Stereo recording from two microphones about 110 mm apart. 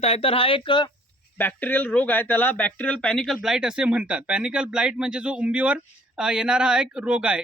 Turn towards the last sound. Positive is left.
turn(degrees=-10)  # may be behind; listen again after turning